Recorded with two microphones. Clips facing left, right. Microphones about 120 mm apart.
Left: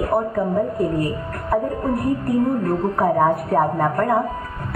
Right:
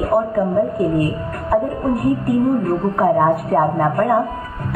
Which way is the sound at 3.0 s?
Centre (ahead or behind).